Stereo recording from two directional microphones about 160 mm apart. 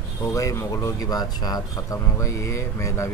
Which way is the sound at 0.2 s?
20° left (ahead or behind).